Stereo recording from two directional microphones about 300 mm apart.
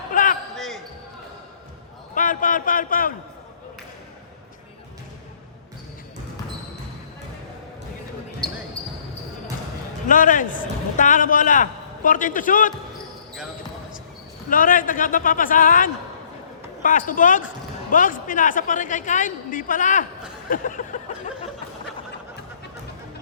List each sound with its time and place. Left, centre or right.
0.1 s basketball bounce: left
0.5 s basketball bounce: centre
2.1 s speech: left
10.1 s a man's voice: left
14.5 s a man's voice: left